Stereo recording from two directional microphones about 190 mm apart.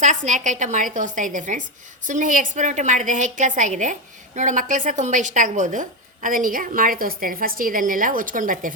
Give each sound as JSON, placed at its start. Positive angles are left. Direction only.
{"t": 0.0, "sound": "a woman's voice", "side_deg": -40}